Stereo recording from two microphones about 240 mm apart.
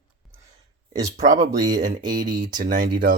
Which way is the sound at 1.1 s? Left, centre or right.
Right.